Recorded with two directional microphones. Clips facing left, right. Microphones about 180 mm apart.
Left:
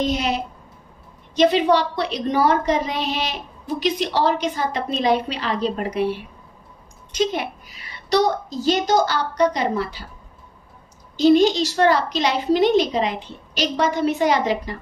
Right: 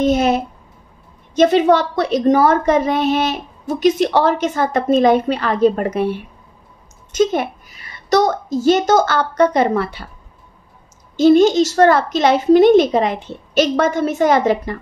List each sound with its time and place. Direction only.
0.0 s a woman's voice: 50° right (ahead or behind)
11.1 s a woman's voice: 50° right (ahead or behind)